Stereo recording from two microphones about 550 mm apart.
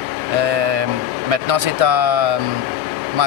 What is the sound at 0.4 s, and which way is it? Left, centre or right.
Vehicle, right.